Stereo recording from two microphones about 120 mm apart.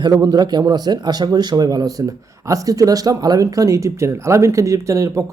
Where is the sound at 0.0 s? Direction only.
30° right (ahead or behind).